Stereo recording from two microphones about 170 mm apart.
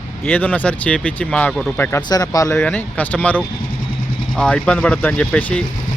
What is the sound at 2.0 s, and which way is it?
Speech, 25° left (ahead or behind).